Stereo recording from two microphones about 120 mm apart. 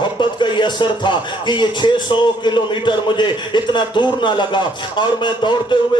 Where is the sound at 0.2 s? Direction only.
40° left (ahead or behind).